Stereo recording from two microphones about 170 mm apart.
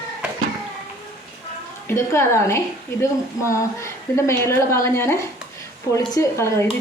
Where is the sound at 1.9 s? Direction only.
15° left (ahead or behind).